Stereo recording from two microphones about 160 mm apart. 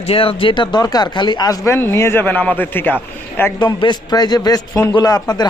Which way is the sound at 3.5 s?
25° left (ahead or behind).